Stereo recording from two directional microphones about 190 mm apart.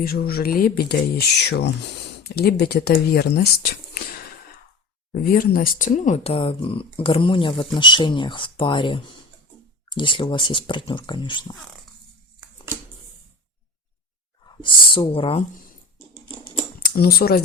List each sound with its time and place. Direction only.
0.0 s speech: 50° left (ahead or behind); by 11.5 s 25° left (ahead or behind)
14.6 s speech: 25° left (ahead or behind)
16.8 s speech: 55° left (ahead or behind)